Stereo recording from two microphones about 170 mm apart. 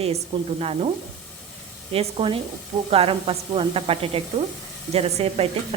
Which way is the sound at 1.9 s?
30° right (ahead or behind).